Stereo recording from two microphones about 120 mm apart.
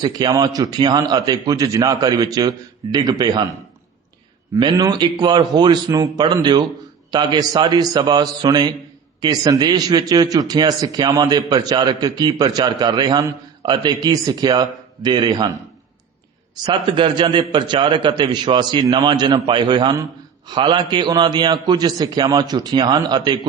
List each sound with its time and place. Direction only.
0.0 s a man's voice: 35° right (ahead or behind)
4.6 s a man's voice: 40° right (ahead or behind)
16.6 s a man's voice: 45° right (ahead or behind)